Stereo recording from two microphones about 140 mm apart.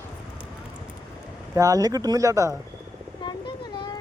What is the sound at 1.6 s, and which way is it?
Speech, 25° right (ahead or behind).